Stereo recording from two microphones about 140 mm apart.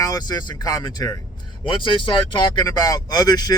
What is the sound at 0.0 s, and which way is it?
Speech, 25° left (ahead or behind).